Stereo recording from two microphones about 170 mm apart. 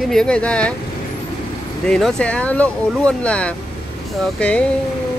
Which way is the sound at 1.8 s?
5° left (ahead or behind).